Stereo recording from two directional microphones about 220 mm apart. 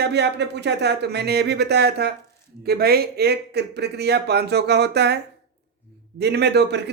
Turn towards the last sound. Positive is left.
turn(degrees=-50)  # may be behind; listen again after turning